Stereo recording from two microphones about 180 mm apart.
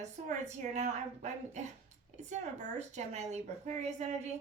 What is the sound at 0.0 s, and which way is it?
Speech, 40° right (ahead or behind).